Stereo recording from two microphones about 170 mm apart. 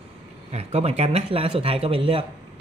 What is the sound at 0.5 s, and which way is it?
Speech, 40° right (ahead or behind).